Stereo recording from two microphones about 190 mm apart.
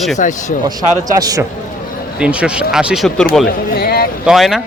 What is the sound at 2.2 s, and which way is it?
A man's voice, 5° right (ahead or behind).